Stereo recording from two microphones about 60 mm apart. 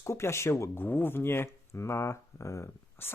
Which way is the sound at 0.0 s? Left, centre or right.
Left.